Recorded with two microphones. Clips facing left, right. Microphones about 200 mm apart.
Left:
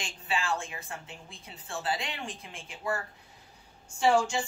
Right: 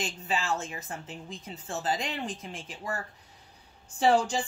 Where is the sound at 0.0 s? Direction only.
40° right (ahead or behind).